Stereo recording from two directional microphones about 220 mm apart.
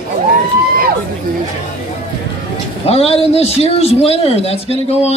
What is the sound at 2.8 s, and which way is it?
A man's voice, 25° left (ahead or behind).